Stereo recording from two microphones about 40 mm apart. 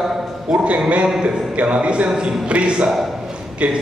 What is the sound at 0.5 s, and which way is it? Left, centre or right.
A man's voice, right.